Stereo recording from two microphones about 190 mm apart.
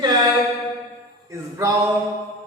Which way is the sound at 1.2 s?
15° right (ahead or behind).